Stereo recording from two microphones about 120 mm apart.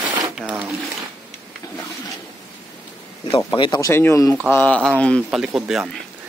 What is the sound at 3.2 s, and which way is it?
Speech, 45° left (ahead or behind).